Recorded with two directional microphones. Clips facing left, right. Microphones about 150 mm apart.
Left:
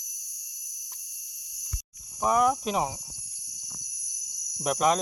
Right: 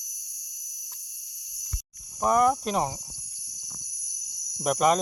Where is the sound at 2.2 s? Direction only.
Centre (ahead or behind).